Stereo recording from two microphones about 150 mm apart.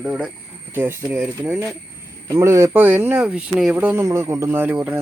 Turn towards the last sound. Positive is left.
turn(degrees=-10)  # may be behind; listen again after turning